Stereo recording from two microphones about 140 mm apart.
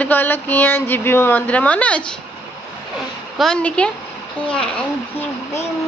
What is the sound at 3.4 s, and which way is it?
Speech, 5° left (ahead or behind).